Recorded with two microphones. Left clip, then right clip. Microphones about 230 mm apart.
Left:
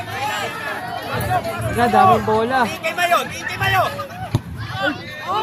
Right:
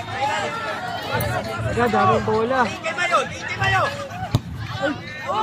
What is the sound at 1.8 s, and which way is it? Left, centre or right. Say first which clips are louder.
Speech: left 5 dB; left.